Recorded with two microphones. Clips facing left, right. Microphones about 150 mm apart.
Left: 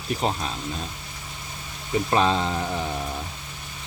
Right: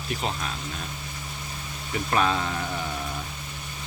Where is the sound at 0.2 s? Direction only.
35° left (ahead or behind).